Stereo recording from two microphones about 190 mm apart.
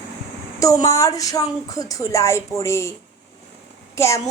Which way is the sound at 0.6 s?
20° left (ahead or behind).